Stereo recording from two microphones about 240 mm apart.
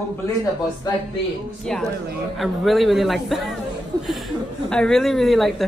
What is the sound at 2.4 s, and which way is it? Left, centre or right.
A woman's voice, centre.